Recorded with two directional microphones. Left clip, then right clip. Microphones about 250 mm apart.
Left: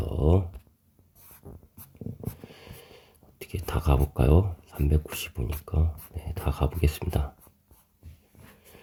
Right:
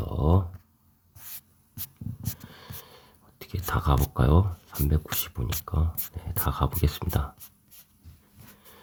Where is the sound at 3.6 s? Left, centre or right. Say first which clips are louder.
Right 2 dB; centre.